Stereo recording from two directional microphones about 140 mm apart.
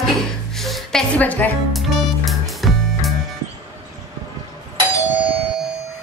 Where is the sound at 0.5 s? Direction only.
Centre (ahead or behind).